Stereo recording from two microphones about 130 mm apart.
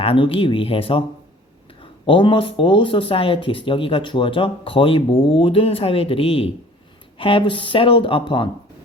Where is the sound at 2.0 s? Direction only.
40° left (ahead or behind).